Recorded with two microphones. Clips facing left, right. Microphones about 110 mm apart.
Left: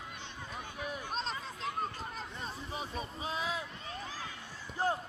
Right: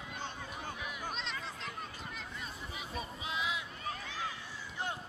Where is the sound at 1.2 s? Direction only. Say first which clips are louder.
Left 3 dB; 40° left (ahead or behind).